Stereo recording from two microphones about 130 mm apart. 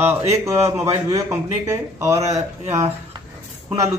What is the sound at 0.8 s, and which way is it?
A man's voice, 25° right (ahead or behind).